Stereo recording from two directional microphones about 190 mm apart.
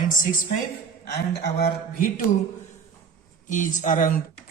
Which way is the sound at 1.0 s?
60° left (ahead or behind).